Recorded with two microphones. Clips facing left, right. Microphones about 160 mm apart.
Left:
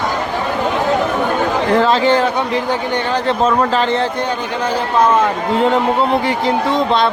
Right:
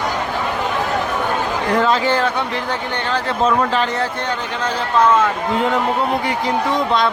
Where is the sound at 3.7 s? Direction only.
30° left (ahead or behind).